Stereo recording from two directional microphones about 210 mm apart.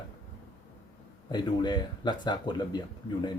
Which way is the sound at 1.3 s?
20° left (ahead or behind).